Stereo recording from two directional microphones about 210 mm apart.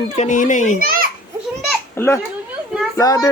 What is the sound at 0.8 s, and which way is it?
Speech, 45° right (ahead or behind).